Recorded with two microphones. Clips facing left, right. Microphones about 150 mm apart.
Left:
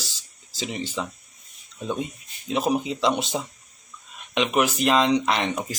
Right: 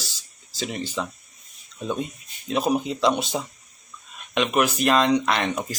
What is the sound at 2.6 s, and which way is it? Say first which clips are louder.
Speech: right 1 dB; 5° left (ahead or behind).